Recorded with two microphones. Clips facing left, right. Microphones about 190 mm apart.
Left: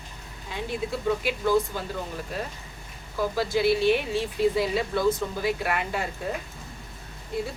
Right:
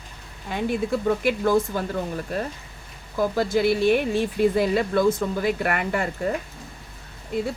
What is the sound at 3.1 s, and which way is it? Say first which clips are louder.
Speech: right 4 dB; 45° right (ahead or behind).